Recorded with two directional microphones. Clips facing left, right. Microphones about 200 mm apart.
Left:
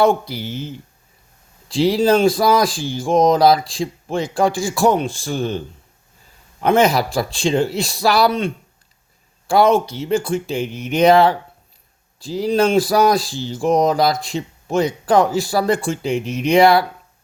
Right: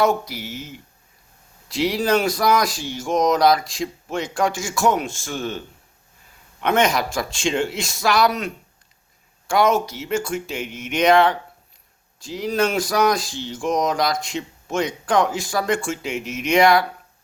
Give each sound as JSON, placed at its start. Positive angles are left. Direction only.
{"t": 0.0, "sound": "speech", "side_deg": 30}